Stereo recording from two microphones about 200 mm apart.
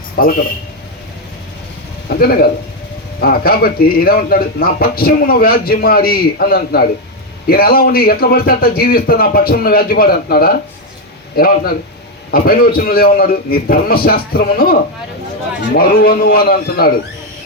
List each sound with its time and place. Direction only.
0.2 s a man's voice: 50° left (ahead or behind)
2.0 s a man's voice: 50° left (ahead or behind)